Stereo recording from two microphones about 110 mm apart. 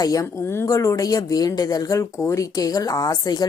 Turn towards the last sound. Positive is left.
turn(degrees=35)  # may be behind; listen again after turning